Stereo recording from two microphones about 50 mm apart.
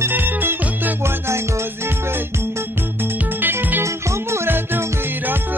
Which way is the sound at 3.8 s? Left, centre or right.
Right.